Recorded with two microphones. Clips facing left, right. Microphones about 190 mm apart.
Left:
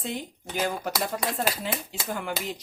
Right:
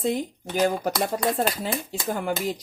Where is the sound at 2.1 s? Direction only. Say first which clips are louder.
Right 5 dB; 40° right (ahead or behind).